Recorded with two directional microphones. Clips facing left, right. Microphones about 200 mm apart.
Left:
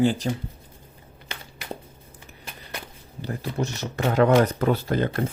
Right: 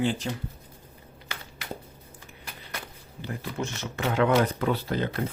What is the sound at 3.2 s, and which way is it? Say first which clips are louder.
Speech: left 4 dB; 35° left (ahead or behind).